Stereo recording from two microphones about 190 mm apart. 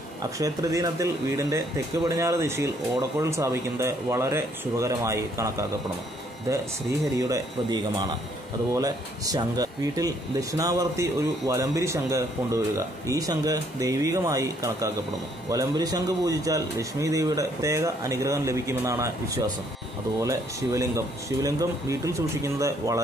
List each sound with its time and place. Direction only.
0.4 s speech: 15° right (ahead or behind)
7.2 s speech: 20° right (ahead or behind)